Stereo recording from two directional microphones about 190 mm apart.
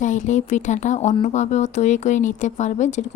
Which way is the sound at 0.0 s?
40° left (ahead or behind).